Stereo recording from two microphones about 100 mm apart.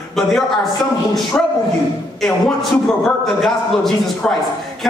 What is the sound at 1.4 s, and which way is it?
Speech, 15° left (ahead or behind).